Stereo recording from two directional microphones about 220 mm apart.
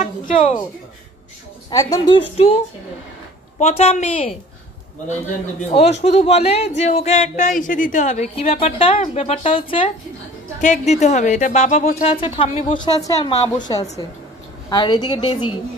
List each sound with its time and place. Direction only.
0.0 s a sound: 35° left (ahead or behind)
1.7 s a woman's voice: 15° left (ahead or behind)
2.3 s a woman's voice: 25° left (ahead or behind)
5.7 s a woman's voice: 30° left (ahead or behind)
14.7 s a woman's voice: 20° left (ahead or behind)